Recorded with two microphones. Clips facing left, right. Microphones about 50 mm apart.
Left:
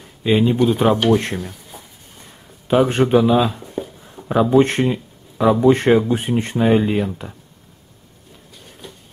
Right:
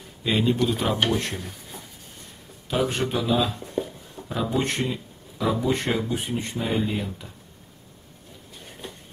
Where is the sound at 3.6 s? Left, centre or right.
Centre.